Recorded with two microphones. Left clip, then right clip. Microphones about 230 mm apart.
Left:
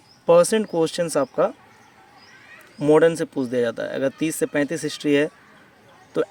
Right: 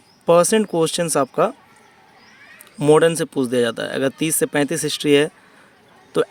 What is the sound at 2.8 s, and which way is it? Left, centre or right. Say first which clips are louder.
Speech: right 2 dB; right.